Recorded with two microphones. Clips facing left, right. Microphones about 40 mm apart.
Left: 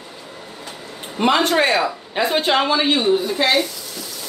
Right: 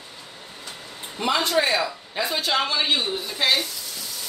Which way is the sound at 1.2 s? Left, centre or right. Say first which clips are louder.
Left 6 dB; left.